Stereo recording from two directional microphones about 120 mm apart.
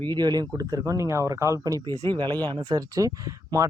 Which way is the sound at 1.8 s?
40° right (ahead or behind).